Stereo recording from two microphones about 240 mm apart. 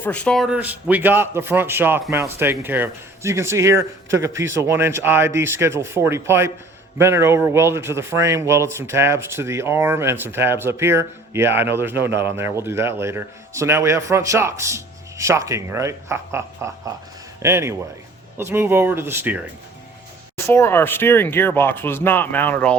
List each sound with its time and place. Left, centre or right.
0.0 s a man's voice: centre
20.3 s speech: centre